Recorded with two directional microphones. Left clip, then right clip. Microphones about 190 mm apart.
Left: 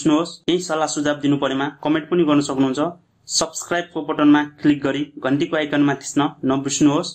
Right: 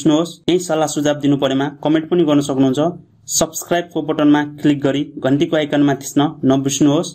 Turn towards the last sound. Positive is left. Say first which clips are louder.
# right 3 dB
turn(degrees=-40)  # may be behind; listen again after turning